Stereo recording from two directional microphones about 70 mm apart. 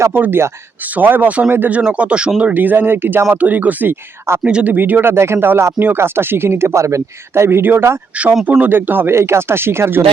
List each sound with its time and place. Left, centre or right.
0.1 s speech: right
7.6 s speech: right